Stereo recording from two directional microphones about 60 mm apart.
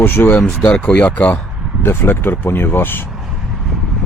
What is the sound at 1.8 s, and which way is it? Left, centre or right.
Speech, left.